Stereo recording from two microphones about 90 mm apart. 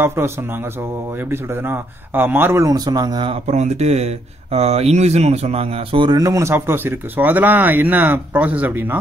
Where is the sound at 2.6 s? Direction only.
45° right (ahead or behind).